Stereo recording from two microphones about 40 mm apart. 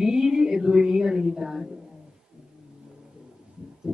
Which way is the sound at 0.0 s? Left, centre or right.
Centre.